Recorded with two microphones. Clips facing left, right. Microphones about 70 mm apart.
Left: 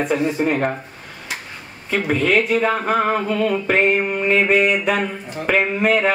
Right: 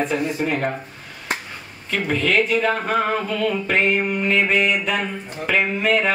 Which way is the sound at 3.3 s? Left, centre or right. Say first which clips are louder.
Left 3 dB; left.